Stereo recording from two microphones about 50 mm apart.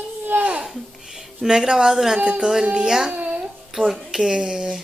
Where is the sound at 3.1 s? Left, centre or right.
Right.